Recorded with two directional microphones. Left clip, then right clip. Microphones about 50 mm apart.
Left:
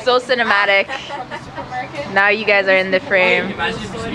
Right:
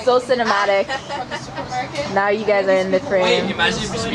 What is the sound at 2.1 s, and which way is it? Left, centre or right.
Speech, left.